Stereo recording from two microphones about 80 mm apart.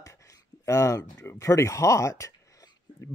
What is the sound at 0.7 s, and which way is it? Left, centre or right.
Speech, left.